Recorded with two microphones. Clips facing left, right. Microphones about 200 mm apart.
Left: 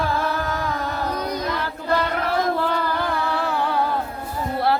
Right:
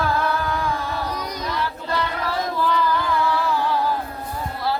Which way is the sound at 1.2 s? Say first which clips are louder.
Left 2 dB; 55° left (ahead or behind).